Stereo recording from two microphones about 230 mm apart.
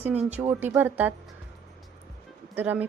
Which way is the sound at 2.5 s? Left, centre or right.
Centre.